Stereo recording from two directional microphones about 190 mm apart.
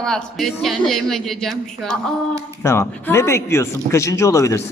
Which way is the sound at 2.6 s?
15° left (ahead or behind).